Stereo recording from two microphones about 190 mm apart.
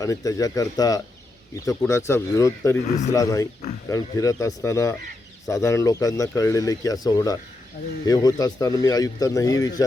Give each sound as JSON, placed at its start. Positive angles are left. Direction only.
{"t": 0.0, "sound": "speech", "side_deg": 20}
{"t": 2.8, "sound": "speech", "side_deg": 40}
{"t": 3.1, "sound": "speech", "side_deg": 15}